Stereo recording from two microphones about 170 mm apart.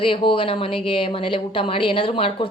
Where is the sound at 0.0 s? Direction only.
30° left (ahead or behind).